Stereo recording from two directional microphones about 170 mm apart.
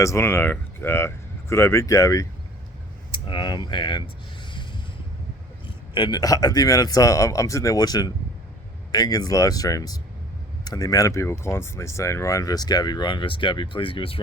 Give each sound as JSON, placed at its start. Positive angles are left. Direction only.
{"t": 0.0, "sound": "speech", "side_deg": 15}
{"t": 5.6, "sound": "speech", "side_deg": 25}